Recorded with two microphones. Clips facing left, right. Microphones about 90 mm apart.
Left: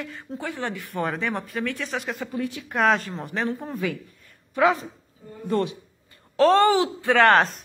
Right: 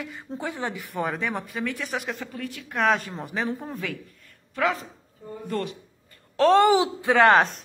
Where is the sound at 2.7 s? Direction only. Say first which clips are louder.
Left 2 dB; centre (ahead or behind).